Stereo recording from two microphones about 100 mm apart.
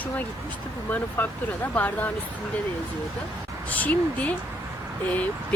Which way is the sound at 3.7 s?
15° left (ahead or behind).